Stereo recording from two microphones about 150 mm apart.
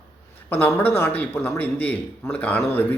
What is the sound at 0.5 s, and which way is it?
A man's voice, 15° left (ahead or behind).